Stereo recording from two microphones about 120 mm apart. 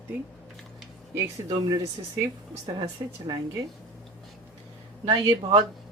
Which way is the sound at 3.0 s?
40° right (ahead or behind).